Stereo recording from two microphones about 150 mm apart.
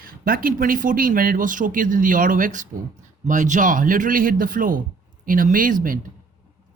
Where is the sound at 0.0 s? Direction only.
75° right (ahead or behind).